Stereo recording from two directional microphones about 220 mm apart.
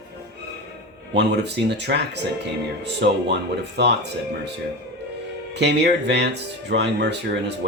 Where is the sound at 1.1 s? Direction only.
50° right (ahead or behind).